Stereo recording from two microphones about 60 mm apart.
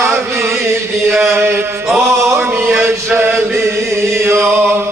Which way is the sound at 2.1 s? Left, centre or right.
Right.